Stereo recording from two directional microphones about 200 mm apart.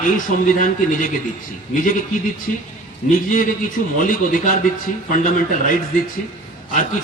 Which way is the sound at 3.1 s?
45° left (ahead or behind).